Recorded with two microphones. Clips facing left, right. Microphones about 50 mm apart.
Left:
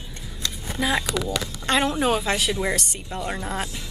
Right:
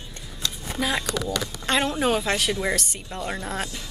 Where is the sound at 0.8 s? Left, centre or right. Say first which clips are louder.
Left 2 dB; centre.